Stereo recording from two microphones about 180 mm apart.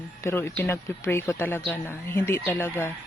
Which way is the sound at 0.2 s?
15° left (ahead or behind).